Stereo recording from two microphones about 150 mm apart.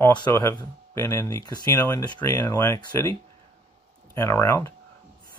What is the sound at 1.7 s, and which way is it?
Speech, 15° left (ahead or behind).